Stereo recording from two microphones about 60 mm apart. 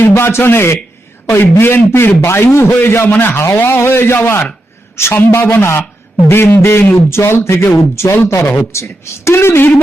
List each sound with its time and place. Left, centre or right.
0.2 s a man's voice: left